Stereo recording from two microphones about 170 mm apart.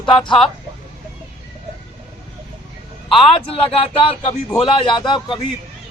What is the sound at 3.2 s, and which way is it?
A man's voice, 35° left (ahead or behind).